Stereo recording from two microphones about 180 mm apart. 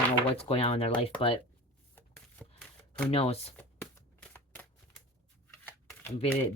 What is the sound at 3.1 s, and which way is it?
Speech, 35° left (ahead or behind).